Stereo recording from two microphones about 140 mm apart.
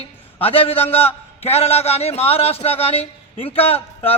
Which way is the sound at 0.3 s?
45° left (ahead or behind).